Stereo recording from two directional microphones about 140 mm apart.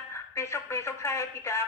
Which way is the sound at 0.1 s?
20° left (ahead or behind).